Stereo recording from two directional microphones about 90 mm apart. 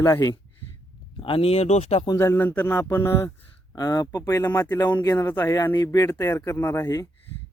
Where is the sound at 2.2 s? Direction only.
25° left (ahead or behind).